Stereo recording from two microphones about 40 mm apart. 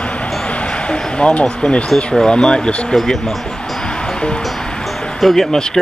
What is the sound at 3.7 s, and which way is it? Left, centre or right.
Music, left.